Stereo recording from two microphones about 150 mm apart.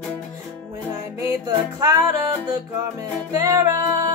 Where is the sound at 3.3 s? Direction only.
25° right (ahead or behind).